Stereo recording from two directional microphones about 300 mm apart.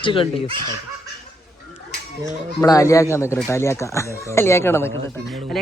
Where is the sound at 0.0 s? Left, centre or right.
Centre.